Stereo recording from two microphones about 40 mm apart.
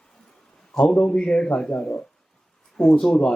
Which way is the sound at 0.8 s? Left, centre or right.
Left.